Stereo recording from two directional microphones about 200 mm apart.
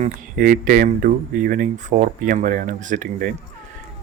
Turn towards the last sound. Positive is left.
turn(degrees=-40)  # may be behind; listen again after turning